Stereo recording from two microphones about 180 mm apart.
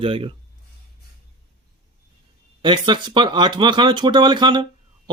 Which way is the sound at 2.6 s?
25° right (ahead or behind).